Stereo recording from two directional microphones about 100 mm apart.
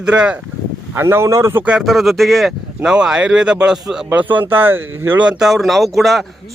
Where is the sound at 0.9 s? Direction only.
25° right (ahead or behind).